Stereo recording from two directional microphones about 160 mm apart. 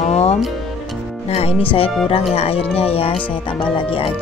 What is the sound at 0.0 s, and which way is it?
Music, 40° left (ahead or behind).